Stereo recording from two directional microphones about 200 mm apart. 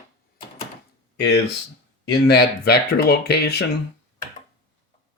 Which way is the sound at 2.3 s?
55° left (ahead or behind).